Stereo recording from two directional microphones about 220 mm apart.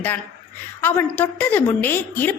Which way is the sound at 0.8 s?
10° left (ahead or behind).